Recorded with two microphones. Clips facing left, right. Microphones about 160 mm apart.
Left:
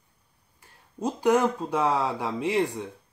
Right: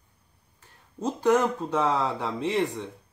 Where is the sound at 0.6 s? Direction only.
10° left (ahead or behind).